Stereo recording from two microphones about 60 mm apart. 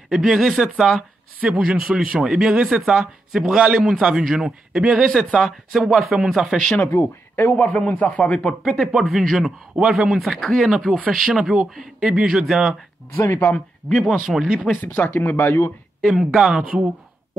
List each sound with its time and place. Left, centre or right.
0.1 s a man's voice: centre
7.5 s a man's voice: centre
8.6 s speech: centre
9.4 s a man's voice: centre
9.9 s a man's voice: centre
13.1 s speech: left
13.4 s speech: left
14.0 s speech: centre
14.4 s a man's voice: centre
14.8 s speech: left
16.0 s a man's voice: centre
16.6 s speech: right